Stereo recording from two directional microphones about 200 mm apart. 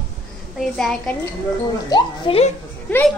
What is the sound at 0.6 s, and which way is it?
Speech, centre (ahead or behind).